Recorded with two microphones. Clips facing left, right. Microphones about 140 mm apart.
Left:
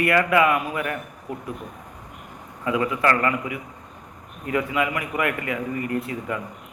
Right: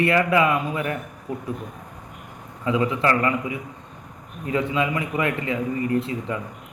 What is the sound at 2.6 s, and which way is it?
A man's voice, 25° right (ahead or behind).